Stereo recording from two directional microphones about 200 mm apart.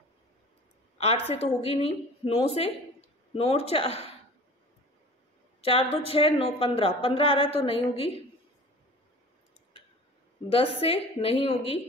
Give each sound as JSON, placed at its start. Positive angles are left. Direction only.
{"t": 0.9, "sound": "a woman's voice", "side_deg": 30}
{"t": 5.6, "sound": "a woman's voice", "side_deg": 30}
{"t": 10.5, "sound": "a woman's voice", "side_deg": 30}